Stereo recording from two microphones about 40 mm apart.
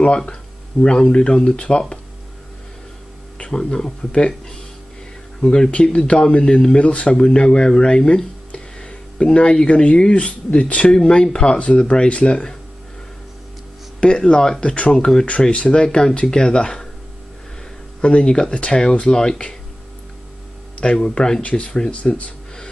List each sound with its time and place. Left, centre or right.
0.2 s speech: left
3.3 s speech: left
5.4 s speech: centre
8.5 s a sound: left
9.8 s speech: left
13.9 s speech: left
18.0 s speech: left
20.8 s speech: left